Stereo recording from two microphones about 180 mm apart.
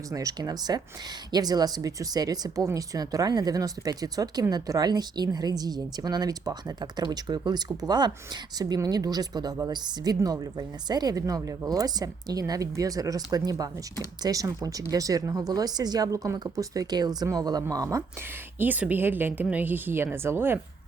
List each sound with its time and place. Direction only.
0.1 s speech: 20° right (ahead or behind)